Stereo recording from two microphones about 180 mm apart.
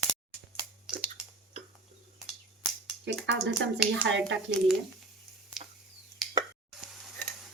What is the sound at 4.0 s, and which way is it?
Speech, 90° right.